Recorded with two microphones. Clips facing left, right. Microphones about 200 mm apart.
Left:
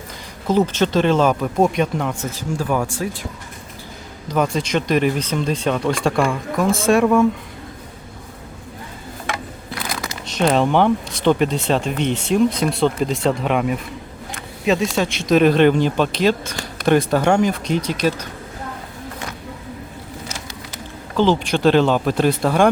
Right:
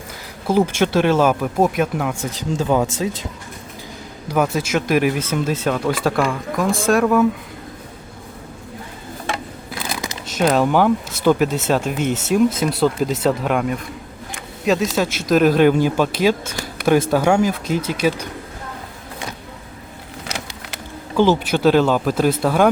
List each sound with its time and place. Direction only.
0.4 s speech: 10° right (ahead or behind)
4.3 s speech: 5° right (ahead or behind)
10.2 s speech: 5° right (ahead or behind)
20.2 s vehicle: 70° right (ahead or behind)
21.2 s speech: 5° right (ahead or behind)